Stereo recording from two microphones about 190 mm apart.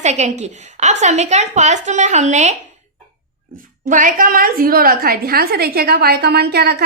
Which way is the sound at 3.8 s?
45° right (ahead or behind).